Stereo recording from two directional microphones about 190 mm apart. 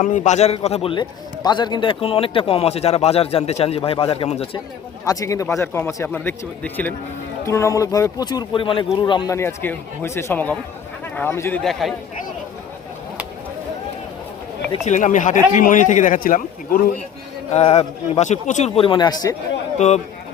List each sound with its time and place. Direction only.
0.0 s a man's voice: 40° left (ahead or behind)
5.0 s speech: 15° left (ahead or behind); by 11.9 s centre (ahead or behind)
14.8 s a man's voice: 40° left (ahead or behind)
17.5 s speech: 35° left (ahead or behind)